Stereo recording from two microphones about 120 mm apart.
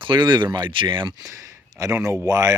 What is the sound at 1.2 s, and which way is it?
Speech, 30° right (ahead or behind).